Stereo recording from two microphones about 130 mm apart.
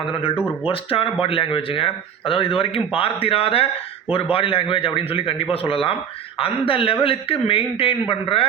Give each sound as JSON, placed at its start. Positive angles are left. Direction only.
{"t": 0.1, "sound": "speech", "side_deg": 45}